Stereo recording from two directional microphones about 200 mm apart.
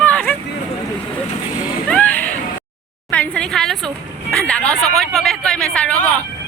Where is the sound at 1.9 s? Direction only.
5° left (ahead or behind).